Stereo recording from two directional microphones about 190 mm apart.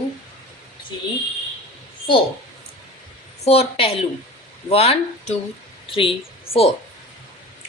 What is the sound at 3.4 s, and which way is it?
Speech, 35° left (ahead or behind).